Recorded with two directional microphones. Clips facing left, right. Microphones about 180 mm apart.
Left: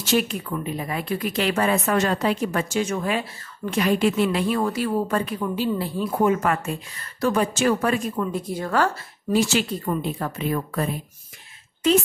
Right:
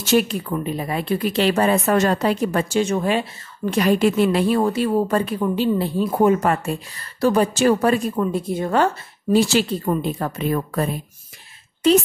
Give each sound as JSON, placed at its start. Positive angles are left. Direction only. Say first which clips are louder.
{"t": 0.1, "sound": "speech", "louder": "right 4 dB", "side_deg": -35}